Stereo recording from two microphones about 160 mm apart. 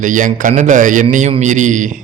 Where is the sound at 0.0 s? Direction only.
55° right (ahead or behind).